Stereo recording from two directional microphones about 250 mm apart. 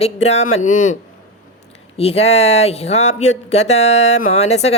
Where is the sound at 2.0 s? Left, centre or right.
Left.